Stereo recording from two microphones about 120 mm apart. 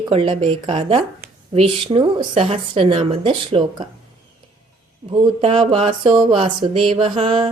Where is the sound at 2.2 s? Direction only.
55° right (ahead or behind).